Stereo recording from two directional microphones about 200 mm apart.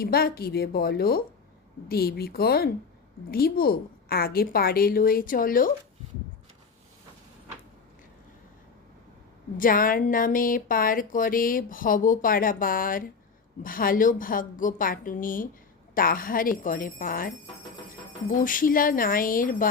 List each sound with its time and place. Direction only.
0.0 s speech: 50° left (ahead or behind)
9.6 s speech: 45° left (ahead or behind)
18.3 s speech: 45° left (ahead or behind)